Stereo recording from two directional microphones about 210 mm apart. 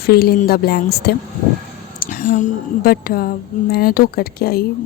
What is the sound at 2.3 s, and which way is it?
Speech, 40° left (ahead or behind).